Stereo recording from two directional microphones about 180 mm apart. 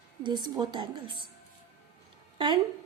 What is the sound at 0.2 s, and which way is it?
Speech, 25° right (ahead or behind).